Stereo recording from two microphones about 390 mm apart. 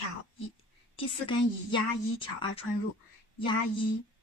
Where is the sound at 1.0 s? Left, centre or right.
Centre.